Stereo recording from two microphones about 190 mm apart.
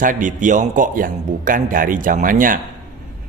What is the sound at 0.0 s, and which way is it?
Speech, 45° right (ahead or behind).